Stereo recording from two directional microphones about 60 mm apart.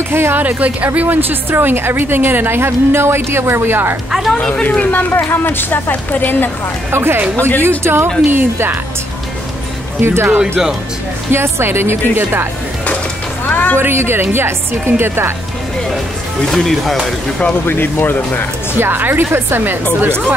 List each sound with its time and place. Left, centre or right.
0.1 s a woman's voice: right
4.1 s speech: centre
4.4 s speech: centre
4.6 s speech: left
5.1 s speech: left
6.9 s a woman's voice: right
7.3 s speech: left
7.8 s a woman's voice: right
10.0 s a woman's voice: right
13.5 s music: left
13.7 s a woman's voice: right
16.4 s speech: centre
17.6 s speech: left
18.8 s a woman's voice: right